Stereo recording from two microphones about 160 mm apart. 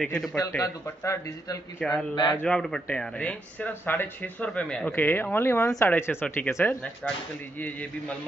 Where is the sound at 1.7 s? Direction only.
5° left (ahead or behind).